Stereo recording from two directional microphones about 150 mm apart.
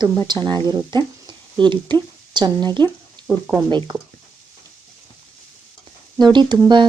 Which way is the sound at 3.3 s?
10° right (ahead or behind).